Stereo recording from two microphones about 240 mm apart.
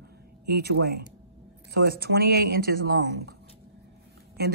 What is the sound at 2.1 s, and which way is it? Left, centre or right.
Speech, right.